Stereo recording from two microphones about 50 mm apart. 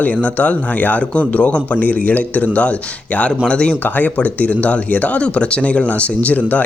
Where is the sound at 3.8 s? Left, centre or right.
Left.